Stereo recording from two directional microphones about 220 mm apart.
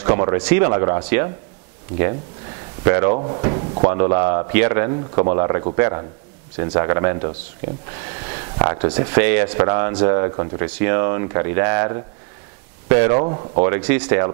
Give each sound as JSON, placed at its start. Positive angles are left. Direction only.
{"t": 0.0, "sound": "speech", "side_deg": -25}
{"t": 2.8, "sound": "speech", "side_deg": -25}